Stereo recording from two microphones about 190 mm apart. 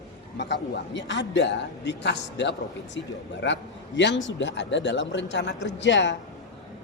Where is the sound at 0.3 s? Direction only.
65° left (ahead or behind).